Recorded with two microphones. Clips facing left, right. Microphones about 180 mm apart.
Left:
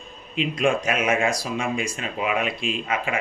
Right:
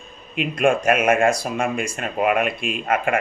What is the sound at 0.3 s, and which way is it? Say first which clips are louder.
Speech: right 3 dB; 55° right (ahead or behind).